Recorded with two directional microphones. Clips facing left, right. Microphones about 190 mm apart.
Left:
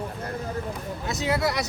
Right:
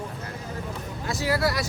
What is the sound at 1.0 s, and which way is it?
Speech, 20° left (ahead or behind).